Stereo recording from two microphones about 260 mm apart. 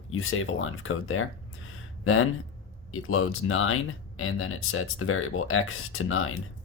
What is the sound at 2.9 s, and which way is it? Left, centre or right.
Speech, left.